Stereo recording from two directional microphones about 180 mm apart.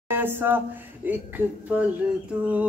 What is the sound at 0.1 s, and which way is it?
Speech, 10° right (ahead or behind).